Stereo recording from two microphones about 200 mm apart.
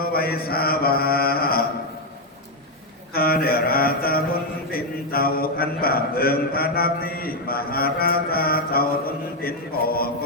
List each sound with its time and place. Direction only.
0.0 s a man's voice: 50° left (ahead or behind)
3.1 s mantra: 50° left (ahead or behind)
4.7 s a man's voice: 50° left (ahead or behind)